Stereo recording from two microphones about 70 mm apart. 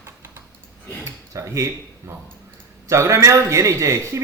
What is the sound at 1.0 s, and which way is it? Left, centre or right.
Speech, right.